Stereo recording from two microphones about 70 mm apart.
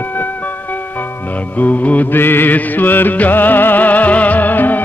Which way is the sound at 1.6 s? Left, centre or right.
Left.